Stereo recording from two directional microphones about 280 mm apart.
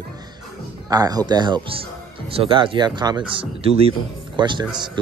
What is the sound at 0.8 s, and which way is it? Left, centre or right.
A man's voice, centre.